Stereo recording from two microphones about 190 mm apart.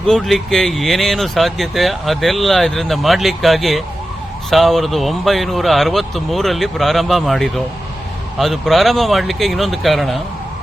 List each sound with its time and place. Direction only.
0.0 s speech: centre (ahead or behind)